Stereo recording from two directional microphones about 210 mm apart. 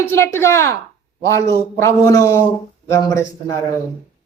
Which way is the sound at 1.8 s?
15° left (ahead or behind).